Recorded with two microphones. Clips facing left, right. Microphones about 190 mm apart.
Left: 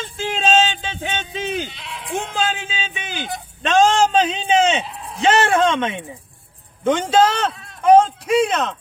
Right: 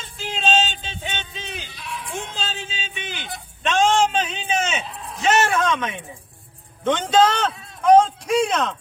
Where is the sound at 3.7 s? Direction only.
40° left (ahead or behind).